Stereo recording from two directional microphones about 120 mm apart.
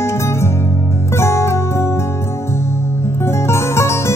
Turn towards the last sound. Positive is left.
turn(degrees=20)  # may be behind; listen again after turning